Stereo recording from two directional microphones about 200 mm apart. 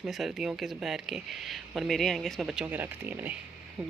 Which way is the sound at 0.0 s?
Centre (ahead or behind).